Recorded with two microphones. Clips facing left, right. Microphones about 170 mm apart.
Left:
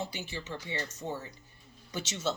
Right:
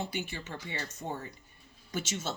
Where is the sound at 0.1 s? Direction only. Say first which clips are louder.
Right 1 dB; 55° right (ahead or behind).